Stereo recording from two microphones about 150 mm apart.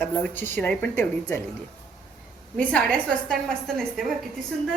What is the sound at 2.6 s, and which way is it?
A woman's voice, 5° left (ahead or behind).